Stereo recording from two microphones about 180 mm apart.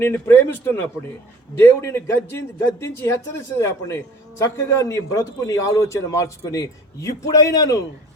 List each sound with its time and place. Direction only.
0.0 s a man's voice: 15° left (ahead or behind)